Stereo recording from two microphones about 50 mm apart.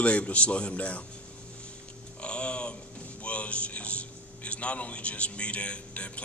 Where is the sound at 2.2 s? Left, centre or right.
Left.